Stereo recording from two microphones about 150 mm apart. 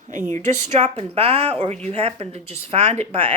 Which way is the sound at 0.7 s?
45° right (ahead or behind).